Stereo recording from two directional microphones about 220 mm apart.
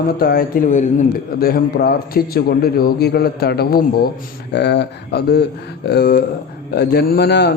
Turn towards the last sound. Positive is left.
turn(degrees=50)  # may be behind; listen again after turning